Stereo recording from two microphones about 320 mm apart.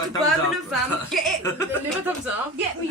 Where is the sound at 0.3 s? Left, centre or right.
Centre.